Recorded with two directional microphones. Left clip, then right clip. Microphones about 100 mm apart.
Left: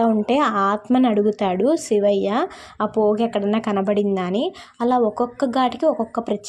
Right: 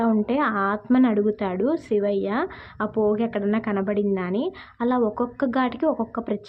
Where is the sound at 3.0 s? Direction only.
15° left (ahead or behind).